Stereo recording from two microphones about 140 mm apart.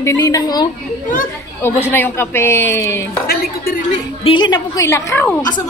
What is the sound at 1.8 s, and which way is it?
A man's voice, 15° left (ahead or behind).